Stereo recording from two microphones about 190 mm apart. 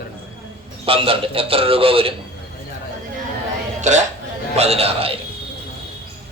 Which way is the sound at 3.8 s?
40° right (ahead or behind).